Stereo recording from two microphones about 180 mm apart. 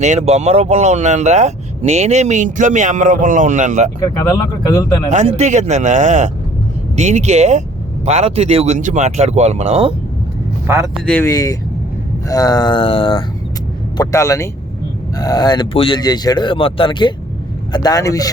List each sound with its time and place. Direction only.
0.0 s speech: 35° right (ahead or behind)
5.0 s speech: 40° right (ahead or behind)
10.7 s speech: 10° right (ahead or behind)
11.0 s speech: 5° left (ahead or behind)
11.3 s speech: 20° left (ahead or behind)